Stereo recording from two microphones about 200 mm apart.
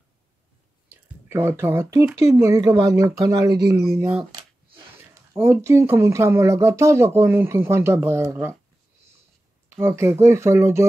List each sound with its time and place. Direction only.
0.8 s speech: 15° right (ahead or behind)
9.8 s speech: 15° right (ahead or behind)